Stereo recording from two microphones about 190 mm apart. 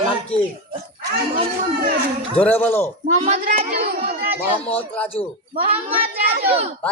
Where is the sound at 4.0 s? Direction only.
55° right (ahead or behind).